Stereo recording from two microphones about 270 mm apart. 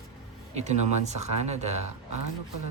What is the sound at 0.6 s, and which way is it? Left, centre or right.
Speech, right.